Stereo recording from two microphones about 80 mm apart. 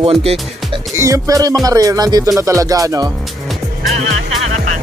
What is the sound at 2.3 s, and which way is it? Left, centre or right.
Speech, right.